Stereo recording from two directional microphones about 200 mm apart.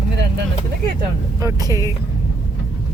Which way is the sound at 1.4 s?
15° right (ahead or behind).